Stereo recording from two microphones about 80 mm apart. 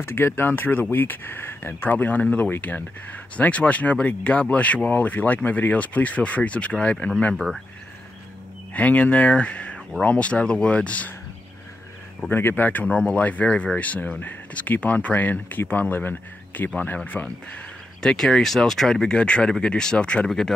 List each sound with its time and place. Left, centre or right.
0.0 s speech: left
7.3 s speech: centre
8.7 s speech: centre
12.3 s speech: left
18.0 s speech: centre